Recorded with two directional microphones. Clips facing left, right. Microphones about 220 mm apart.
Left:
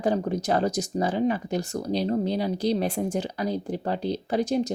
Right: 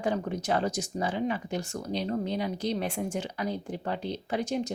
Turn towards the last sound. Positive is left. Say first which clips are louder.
# left 5 dB
turn(degrees=35)  # may be behind; listen again after turning